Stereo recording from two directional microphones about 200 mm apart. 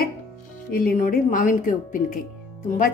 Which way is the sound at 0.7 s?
45° left (ahead or behind).